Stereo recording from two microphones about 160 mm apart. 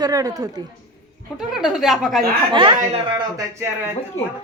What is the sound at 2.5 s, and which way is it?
Speech, 30° right (ahead or behind).